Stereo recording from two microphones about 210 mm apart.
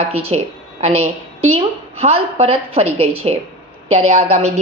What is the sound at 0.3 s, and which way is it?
A woman's voice, 30° right (ahead or behind).